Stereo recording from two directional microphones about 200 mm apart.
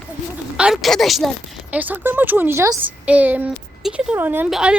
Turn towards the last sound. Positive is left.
turn(degrees=-5)  # may be behind; listen again after turning